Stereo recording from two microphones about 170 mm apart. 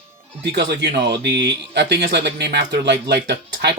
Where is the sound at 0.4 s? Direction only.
90° right.